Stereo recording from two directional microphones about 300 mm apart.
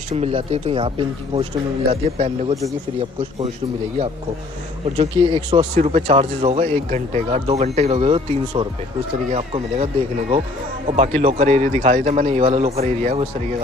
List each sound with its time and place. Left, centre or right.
0.1 s speech: centre
4.9 s speech: centre
10.9 s speech: right